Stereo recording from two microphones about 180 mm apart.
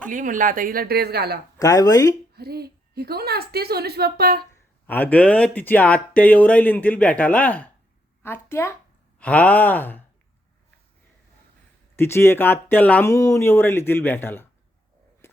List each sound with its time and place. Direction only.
0.1 s speech: 45° right (ahead or behind); by 1.4 s 60° right (ahead or behind)
1.5 s speech: 20° left (ahead or behind)
2.3 s a woman's voice: 60° right (ahead or behind)
4.9 s speech: 10° left (ahead or behind)
11.9 s speech: 15° left (ahead or behind)
15.2 s a sound: 15° left (ahead or behind)